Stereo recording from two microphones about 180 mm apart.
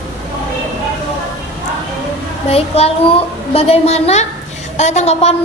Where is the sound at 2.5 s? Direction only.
35° left (ahead or behind).